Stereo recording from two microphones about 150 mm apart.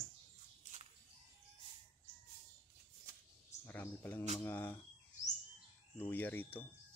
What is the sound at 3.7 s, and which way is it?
Speech, 15° left (ahead or behind).